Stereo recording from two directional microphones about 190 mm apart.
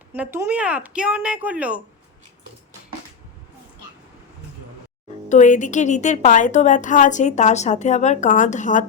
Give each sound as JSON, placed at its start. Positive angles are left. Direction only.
{"t": 0.1, "sound": "speech", "side_deg": -10}
{"t": 5.3, "sound": "a woman's voice", "side_deg": 40}